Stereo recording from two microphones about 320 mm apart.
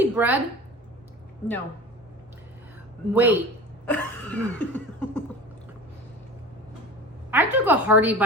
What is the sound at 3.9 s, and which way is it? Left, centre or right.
Cough, centre.